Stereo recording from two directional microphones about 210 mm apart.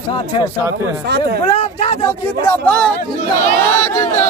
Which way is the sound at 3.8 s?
15° left (ahead or behind).